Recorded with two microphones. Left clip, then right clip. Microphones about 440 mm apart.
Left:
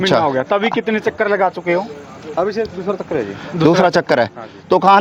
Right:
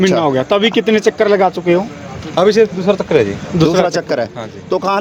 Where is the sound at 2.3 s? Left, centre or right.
Right.